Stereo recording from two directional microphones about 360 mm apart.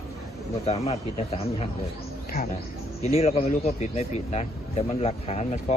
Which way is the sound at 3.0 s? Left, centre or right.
Centre.